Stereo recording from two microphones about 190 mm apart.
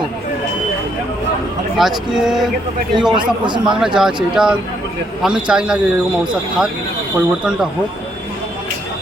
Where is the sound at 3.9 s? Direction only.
5° right (ahead or behind).